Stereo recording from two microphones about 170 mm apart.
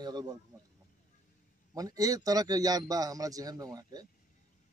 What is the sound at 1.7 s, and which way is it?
Speech, 20° right (ahead or behind).